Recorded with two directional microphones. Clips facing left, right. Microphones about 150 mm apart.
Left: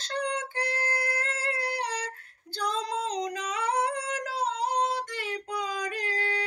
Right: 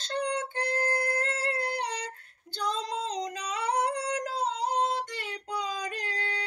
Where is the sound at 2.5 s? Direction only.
20° right (ahead or behind).